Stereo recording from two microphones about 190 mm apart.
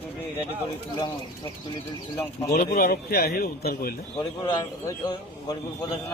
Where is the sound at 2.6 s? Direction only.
45° left (ahead or behind).